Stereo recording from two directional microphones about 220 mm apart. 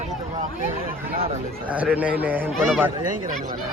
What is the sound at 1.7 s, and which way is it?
A man's voice, 5° right (ahead or behind).